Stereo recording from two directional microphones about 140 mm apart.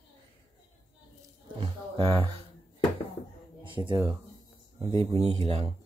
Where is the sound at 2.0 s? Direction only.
40° right (ahead or behind).